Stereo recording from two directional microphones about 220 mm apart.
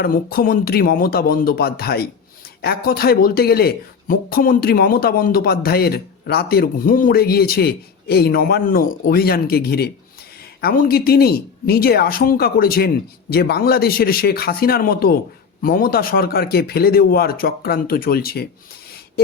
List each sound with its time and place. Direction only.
0.0 s speech: 45° left (ahead or behind)